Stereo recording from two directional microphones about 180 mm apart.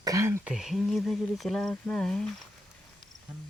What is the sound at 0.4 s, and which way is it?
Speech, centre (ahead or behind).